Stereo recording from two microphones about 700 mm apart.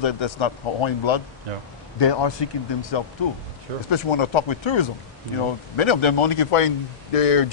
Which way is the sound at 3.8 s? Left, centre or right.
Left.